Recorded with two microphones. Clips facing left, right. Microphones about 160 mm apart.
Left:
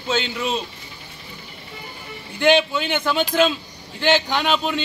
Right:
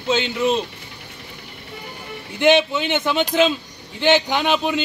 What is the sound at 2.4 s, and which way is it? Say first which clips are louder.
Speech: right 1 dB; 20° right (ahead or behind).